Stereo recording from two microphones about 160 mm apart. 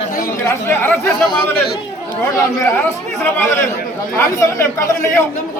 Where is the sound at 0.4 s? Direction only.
15° left (ahead or behind).